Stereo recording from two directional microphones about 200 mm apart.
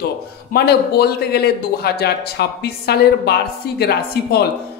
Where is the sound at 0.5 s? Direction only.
50° left (ahead or behind).